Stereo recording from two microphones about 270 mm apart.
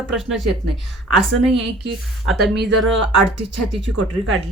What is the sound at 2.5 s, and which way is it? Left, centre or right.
Speech, right.